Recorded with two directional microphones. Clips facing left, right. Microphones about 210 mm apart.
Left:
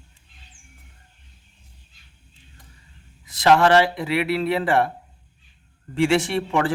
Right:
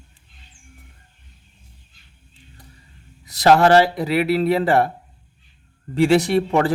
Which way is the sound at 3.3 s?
40° right (ahead or behind).